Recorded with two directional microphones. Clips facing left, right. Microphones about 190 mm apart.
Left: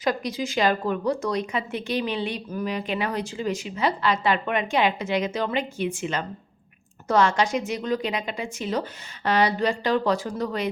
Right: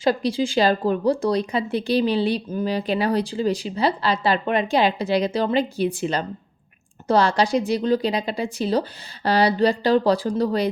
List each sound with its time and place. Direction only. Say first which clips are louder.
0.0 s speech: right 5 dB; 30° right (ahead or behind)